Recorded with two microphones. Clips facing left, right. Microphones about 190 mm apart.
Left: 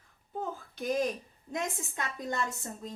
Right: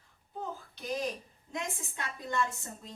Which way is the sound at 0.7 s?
50° left (ahead or behind).